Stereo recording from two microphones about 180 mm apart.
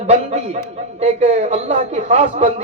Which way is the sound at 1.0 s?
35° right (ahead or behind).